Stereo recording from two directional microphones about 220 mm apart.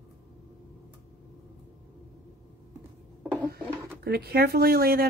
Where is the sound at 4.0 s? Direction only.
45° right (ahead or behind).